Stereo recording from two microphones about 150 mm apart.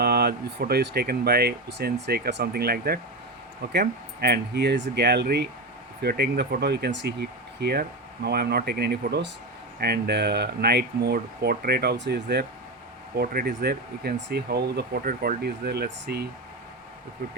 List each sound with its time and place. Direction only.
0.0 s speech: 90° right
13.1 s speech: 80° right